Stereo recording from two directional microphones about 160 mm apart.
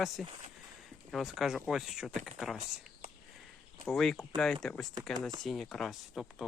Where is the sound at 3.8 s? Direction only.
5° left (ahead or behind).